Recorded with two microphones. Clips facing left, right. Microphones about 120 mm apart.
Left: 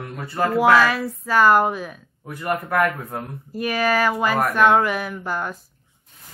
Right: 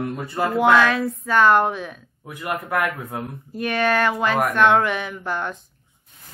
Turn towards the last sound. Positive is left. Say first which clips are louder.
# even
turn(degrees=5)  # may be behind; listen again after turning